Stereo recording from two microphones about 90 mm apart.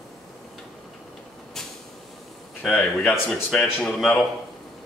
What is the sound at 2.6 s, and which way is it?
Speech, 10° left (ahead or behind).